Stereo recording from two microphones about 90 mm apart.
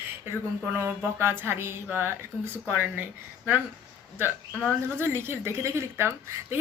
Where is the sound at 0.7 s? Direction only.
25° right (ahead or behind).